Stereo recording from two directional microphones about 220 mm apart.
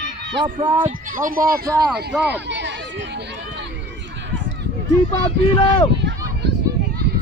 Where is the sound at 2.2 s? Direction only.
50° right (ahead or behind).